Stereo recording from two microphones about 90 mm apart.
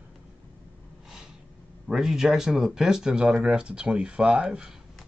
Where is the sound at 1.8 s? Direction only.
5° right (ahead or behind).